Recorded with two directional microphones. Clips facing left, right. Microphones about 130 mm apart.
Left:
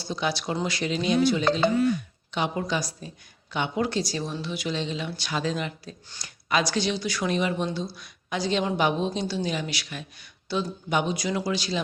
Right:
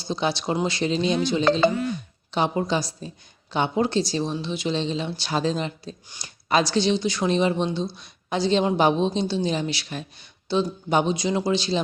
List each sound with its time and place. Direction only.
0.0 s speech: 25° right (ahead or behind)